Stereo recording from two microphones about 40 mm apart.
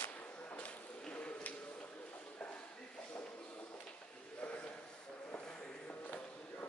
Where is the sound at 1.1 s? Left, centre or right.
Left.